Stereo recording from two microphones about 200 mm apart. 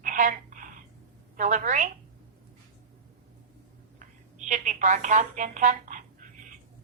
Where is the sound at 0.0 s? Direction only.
40° right (ahead or behind).